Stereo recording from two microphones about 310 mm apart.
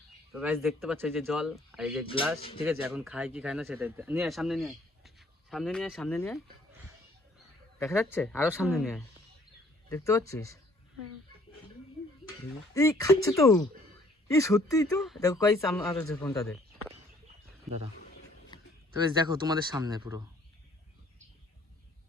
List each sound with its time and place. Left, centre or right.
0.3 s speech: centre
2.4 s speech: centre
2.6 s speech: centre
7.8 s speech: centre
9.9 s speech: centre
12.7 s speech: centre
19.1 s speech: centre